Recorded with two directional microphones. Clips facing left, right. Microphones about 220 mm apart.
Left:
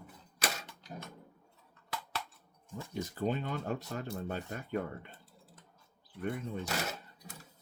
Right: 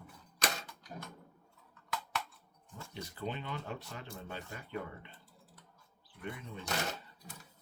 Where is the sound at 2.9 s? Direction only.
45° left (ahead or behind).